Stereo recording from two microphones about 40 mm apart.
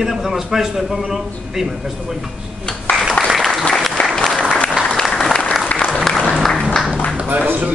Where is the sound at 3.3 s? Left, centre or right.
Centre.